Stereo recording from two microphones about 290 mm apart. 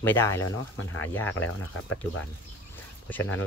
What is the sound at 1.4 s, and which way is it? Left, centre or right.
Speech, left.